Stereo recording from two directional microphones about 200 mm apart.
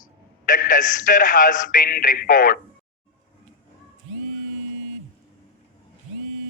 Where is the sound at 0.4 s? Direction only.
40° left (ahead or behind).